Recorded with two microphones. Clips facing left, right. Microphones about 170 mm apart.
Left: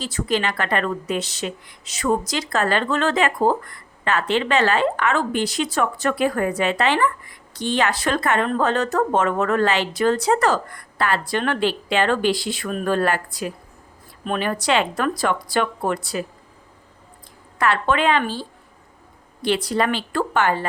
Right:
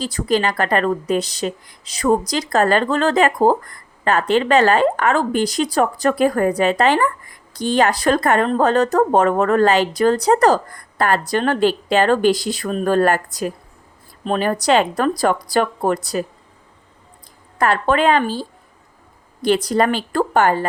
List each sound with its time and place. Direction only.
0.0 s a woman's voice: 40° right (ahead or behind)
17.6 s a woman's voice: 40° right (ahead or behind)